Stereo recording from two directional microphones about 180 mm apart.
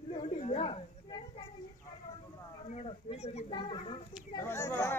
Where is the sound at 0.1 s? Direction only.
35° left (ahead or behind).